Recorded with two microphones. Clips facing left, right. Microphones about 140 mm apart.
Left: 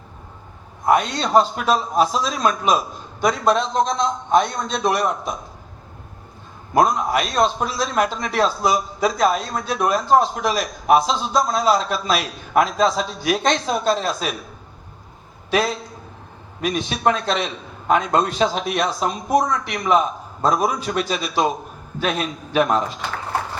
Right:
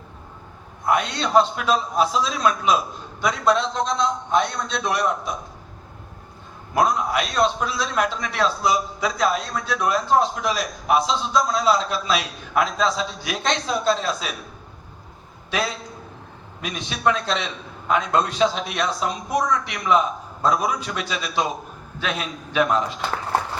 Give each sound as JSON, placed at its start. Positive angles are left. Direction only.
{"t": 0.9, "sound": "a man's voice", "side_deg": 45}
{"t": 6.7, "sound": "a man's voice", "side_deg": 45}
{"t": 16.6, "sound": "a man's voice", "side_deg": 45}
{"t": 22.5, "sound": "a man's voice", "side_deg": 45}